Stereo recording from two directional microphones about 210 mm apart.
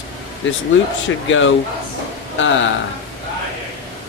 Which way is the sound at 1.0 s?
65° left (ahead or behind).